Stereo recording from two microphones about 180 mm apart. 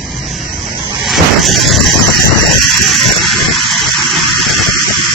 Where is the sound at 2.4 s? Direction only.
Centre (ahead or behind).